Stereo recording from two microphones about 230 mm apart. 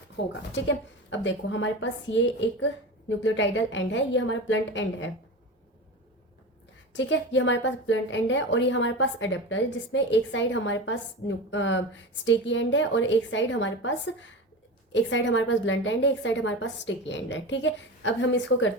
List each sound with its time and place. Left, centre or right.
0.2 s a woman's voice: left
6.9 s a woman's voice: left